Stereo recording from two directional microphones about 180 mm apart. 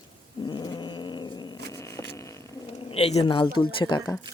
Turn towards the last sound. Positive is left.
turn(degrees=25)  # may be behind; listen again after turning